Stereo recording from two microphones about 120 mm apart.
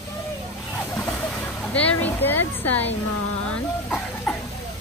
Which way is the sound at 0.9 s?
10° left (ahead or behind).